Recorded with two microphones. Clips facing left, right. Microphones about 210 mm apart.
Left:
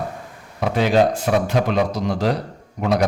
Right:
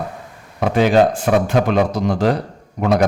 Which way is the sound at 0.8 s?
50° right (ahead or behind).